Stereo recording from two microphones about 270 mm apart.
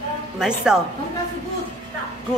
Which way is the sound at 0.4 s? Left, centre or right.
Centre.